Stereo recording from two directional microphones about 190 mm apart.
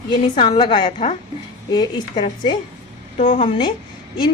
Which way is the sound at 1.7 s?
20° left (ahead or behind).